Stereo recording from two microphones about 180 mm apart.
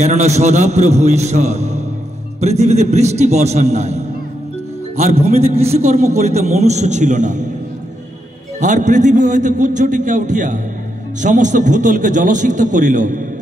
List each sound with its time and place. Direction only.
0.0 s a man's voice: 40° right (ahead or behind)
8.5 s a man's voice: 45° right (ahead or behind)